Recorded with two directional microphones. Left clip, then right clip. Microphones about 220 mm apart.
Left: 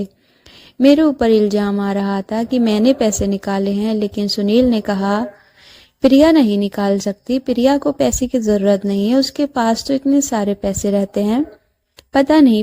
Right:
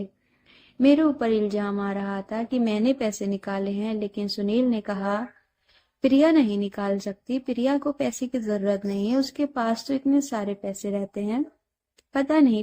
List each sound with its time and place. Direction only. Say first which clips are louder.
0.8 s a woman's voice: left 8 dB; 35° left (ahead or behind)